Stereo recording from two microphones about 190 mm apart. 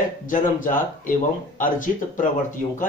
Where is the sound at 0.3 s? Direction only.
45° left (ahead or behind).